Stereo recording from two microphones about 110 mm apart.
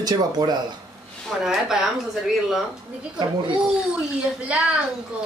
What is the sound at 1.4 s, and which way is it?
Speech, 5° right (ahead or behind).